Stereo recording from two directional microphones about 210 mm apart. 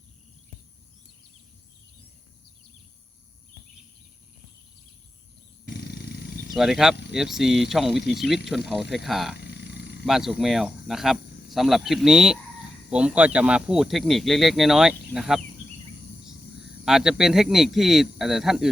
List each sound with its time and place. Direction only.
5.6 s wild animals: 50° left (ahead or behind)
6.6 s speech: centre (ahead or behind)
9.3 s roaring cats: 50° left (ahead or behind)
10.1 s speech: centre (ahead or behind)
16.8 s speech: centre (ahead or behind)